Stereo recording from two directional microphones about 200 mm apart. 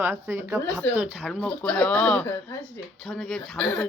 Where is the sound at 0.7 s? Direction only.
Centre (ahead or behind).